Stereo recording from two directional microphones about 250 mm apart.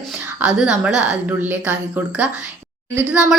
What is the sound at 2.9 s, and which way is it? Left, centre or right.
Speech, centre.